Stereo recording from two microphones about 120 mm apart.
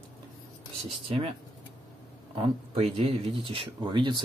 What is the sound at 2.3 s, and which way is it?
Speech, 50° right (ahead or behind).